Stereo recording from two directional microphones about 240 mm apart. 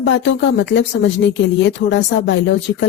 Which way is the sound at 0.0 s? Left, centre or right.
Left.